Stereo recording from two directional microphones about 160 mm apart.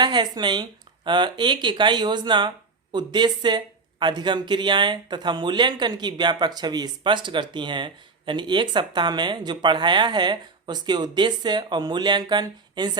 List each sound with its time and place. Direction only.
0.0 s speech: 25° right (ahead or behind)